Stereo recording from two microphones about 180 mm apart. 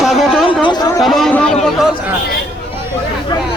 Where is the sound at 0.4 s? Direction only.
25° left (ahead or behind).